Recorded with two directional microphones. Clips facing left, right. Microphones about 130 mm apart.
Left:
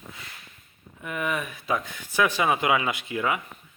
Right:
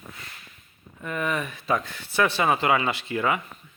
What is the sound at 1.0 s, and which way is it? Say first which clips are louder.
Speech: right 1 dB; 10° left (ahead or behind).